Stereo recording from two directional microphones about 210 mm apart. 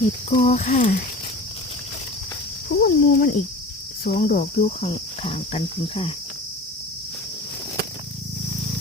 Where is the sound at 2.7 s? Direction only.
45° left (ahead or behind).